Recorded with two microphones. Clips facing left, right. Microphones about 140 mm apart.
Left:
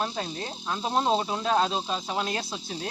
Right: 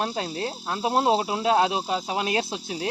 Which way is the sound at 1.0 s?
10° right (ahead or behind).